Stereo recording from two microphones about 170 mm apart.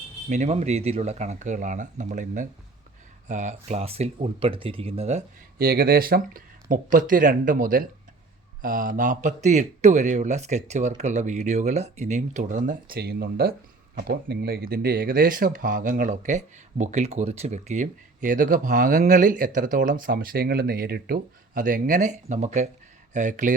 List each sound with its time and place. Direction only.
0.3 s speech: 45° right (ahead or behind)
5.5 s speech: 65° right (ahead or behind); by 23.6 s 45° right (ahead or behind)